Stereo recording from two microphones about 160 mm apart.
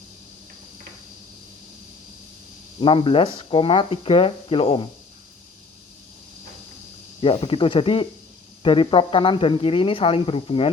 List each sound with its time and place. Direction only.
2.8 s speech: 30° left (ahead or behind)
7.2 s speech: 35° left (ahead or behind)